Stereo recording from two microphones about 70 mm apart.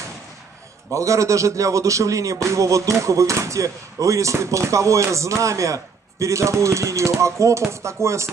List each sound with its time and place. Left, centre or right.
0.9 s music: right